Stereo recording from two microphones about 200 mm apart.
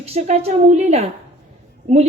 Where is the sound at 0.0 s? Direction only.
30° right (ahead or behind).